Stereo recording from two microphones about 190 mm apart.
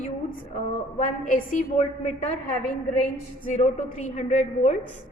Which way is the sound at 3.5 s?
40° left (ahead or behind).